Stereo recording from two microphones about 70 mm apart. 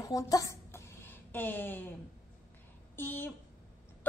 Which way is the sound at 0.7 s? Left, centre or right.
Left.